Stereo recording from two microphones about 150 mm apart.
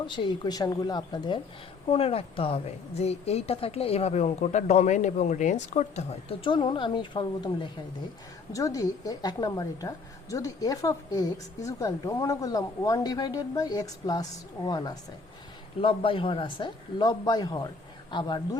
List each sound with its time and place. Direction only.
0.0 s a woman's voice: 35° left (ahead or behind)